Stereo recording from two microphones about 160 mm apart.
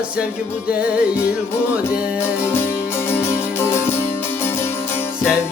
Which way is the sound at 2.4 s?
15° left (ahead or behind).